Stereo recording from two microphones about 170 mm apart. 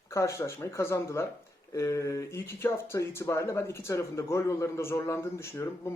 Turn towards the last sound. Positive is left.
turn(degrees=15)  # may be behind; listen again after turning